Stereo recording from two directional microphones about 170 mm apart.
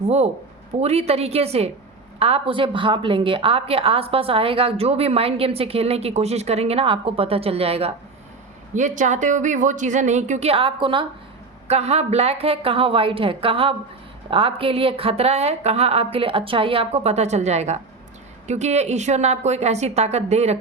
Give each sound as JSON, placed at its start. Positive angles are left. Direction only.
{"t": 0.0, "sound": "a woman's voice", "side_deg": -40}
{"t": 8.7, "sound": "a woman's voice", "side_deg": -45}